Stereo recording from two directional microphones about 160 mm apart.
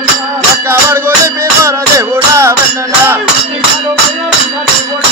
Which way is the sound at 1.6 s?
15° right (ahead or behind).